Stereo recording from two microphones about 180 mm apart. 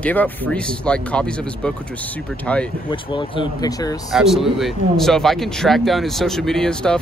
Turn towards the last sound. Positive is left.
turn(degrees=5)  # may be behind; listen again after turning